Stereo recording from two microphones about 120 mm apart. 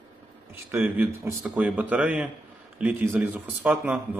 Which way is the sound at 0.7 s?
15° right (ahead or behind).